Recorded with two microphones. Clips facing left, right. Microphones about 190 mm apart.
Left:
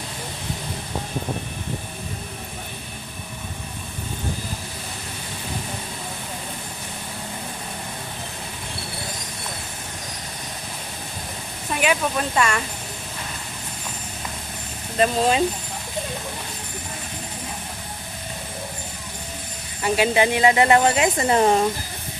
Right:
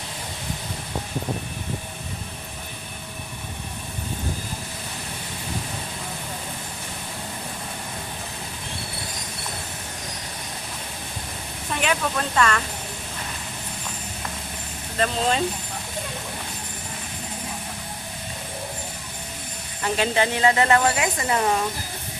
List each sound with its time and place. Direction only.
11.8 s speech: 10° left (ahead or behind)
14.9 s speech: 15° left (ahead or behind)
19.8 s a woman's voice: 10° left (ahead or behind); by 21.6 s 30° left (ahead or behind)